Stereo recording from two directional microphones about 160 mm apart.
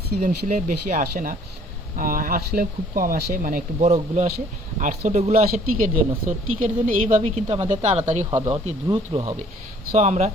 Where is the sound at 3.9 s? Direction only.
40° right (ahead or behind).